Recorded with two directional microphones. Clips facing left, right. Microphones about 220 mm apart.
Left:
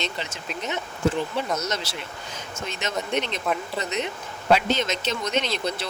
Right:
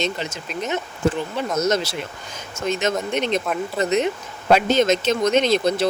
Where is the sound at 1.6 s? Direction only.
45° right (ahead or behind).